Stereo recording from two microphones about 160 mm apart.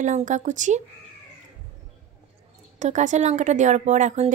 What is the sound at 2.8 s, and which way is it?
Speech, 50° right (ahead or behind).